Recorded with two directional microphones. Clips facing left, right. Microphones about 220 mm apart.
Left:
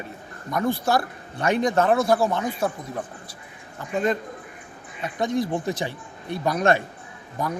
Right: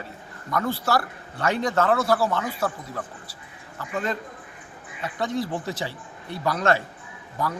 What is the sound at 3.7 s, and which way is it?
A man's voice, 15° left (ahead or behind).